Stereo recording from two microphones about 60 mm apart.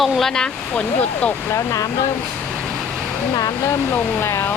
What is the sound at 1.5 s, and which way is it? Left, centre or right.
Speech, left.